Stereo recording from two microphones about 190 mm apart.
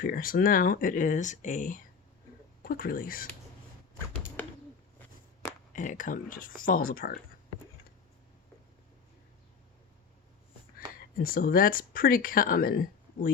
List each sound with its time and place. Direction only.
0.0 s speech: 50° left (ahead or behind)
4.4 s a sound: 10° left (ahead or behind)
5.7 s speech: 45° left (ahead or behind)
11.2 s speech: 50° left (ahead or behind)